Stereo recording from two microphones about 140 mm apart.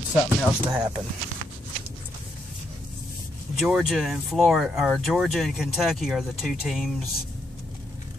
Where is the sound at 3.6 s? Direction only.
Centre (ahead or behind).